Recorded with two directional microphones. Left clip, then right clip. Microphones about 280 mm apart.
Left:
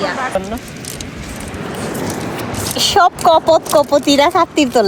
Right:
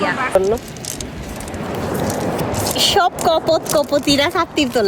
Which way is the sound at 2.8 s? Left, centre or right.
Centre.